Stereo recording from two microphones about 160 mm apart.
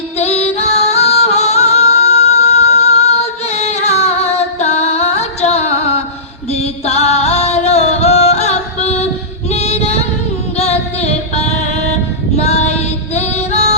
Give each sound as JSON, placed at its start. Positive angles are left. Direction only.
{"t": 0.2, "sound": "music", "side_deg": 40}
{"t": 9.5, "sound": "female singing", "side_deg": 40}
{"t": 10.6, "sound": "music", "side_deg": 40}
{"t": 12.4, "sound": "female singing", "side_deg": 40}